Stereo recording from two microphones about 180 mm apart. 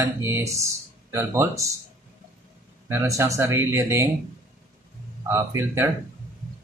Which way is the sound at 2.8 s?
15° right (ahead or behind).